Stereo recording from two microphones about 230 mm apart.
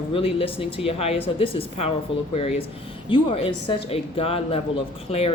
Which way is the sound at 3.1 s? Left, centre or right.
Left.